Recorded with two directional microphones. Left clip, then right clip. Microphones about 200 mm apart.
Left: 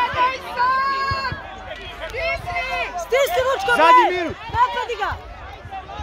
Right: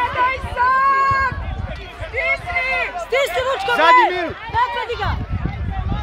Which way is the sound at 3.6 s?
45° left (ahead or behind).